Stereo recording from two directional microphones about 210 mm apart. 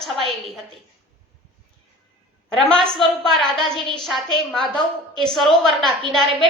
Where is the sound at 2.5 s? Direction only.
Centre (ahead or behind).